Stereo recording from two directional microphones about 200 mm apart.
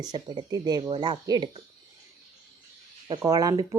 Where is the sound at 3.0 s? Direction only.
20° right (ahead or behind).